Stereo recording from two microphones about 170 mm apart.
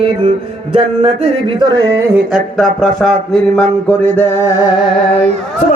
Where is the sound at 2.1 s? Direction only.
Centre (ahead or behind).